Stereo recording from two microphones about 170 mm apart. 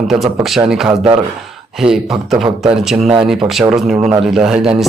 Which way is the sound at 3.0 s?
30° right (ahead or behind).